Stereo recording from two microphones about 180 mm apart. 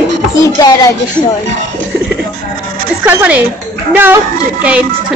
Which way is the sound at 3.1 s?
10° right (ahead or behind).